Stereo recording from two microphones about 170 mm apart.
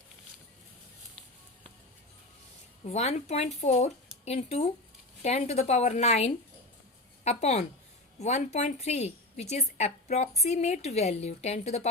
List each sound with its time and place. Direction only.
2.8 s a woman's voice: 40° left (ahead or behind)